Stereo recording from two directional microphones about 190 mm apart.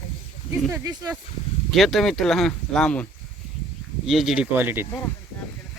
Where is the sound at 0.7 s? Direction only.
20° right (ahead or behind).